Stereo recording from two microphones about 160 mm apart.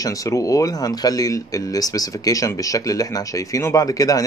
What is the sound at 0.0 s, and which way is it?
Speech, 20° left (ahead or behind).